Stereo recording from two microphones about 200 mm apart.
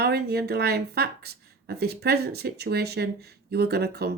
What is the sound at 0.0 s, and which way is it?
Speech, 55° right (ahead or behind).